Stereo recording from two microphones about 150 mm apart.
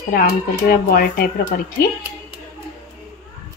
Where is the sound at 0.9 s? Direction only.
90° left.